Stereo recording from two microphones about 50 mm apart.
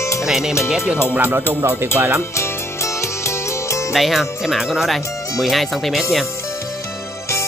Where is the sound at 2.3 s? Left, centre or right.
Left.